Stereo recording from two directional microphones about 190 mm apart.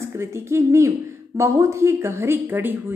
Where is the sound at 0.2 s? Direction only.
15° right (ahead or behind).